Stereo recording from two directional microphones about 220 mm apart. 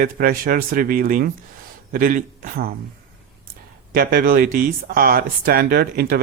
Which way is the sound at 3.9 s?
45° right (ahead or behind).